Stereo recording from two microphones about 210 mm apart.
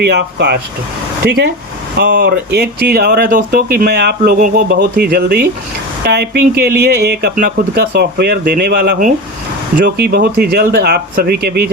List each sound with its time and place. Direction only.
0.0 s speech: 50° right (ahead or behind)